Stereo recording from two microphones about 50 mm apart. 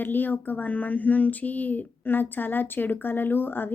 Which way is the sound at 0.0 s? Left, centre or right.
Left.